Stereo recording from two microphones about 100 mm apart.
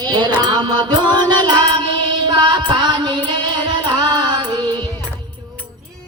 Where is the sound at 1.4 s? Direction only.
50° right (ahead or behind).